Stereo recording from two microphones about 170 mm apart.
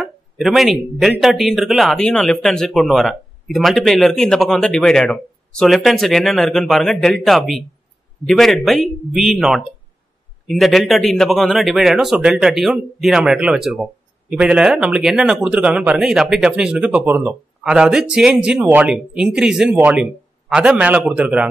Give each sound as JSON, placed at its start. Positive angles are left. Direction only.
{"t": 0.0, "sound": "a man's voice", "side_deg": 0}